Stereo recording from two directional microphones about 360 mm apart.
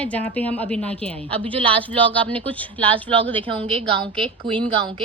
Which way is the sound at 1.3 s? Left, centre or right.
Centre.